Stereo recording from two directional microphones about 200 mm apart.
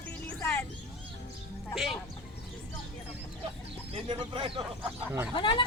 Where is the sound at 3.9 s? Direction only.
25° right (ahead or behind).